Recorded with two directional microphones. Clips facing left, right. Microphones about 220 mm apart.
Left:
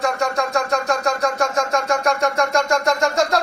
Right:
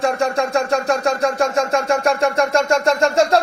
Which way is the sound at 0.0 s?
30° right (ahead or behind).